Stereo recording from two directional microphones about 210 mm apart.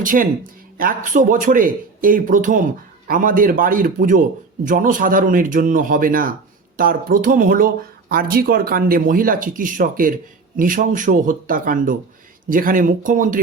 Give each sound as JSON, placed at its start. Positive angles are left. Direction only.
{"t": 0.0, "sound": "a man's voice", "side_deg": -40}